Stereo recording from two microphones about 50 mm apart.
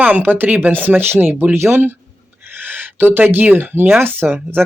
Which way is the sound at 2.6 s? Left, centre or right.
Right.